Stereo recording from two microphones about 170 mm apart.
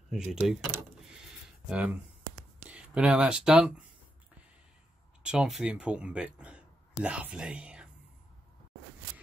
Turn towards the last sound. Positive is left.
turn(degrees=-5)  # may be behind; listen again after turning